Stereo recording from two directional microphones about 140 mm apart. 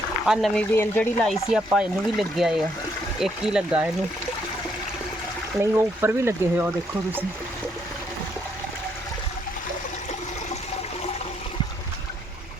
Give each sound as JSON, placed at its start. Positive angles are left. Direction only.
{"t": 0.3, "sound": "speech", "side_deg": 0}
{"t": 5.5, "sound": "speech", "side_deg": -15}